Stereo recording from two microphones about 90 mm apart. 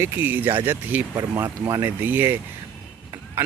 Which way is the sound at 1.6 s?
35° right (ahead or behind).